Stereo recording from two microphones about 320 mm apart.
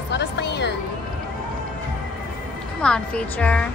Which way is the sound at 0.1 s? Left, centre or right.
Left.